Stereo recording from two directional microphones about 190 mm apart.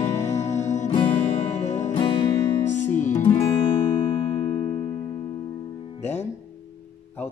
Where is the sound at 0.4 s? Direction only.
35° left (ahead or behind).